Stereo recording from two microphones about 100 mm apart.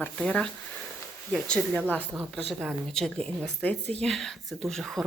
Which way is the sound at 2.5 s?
5° left (ahead or behind).